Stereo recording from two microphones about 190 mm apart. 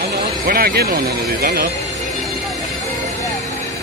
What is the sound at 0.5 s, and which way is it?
Speech, 50° right (ahead or behind).